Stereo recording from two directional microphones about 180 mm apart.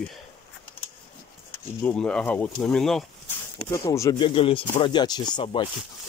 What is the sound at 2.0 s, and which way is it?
Speech, 5° left (ahead or behind).